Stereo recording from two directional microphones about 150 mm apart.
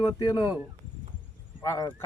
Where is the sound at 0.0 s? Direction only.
25° left (ahead or behind).